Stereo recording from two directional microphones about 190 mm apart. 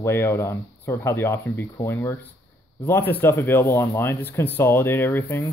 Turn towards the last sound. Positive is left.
turn(degrees=10)  # may be behind; listen again after turning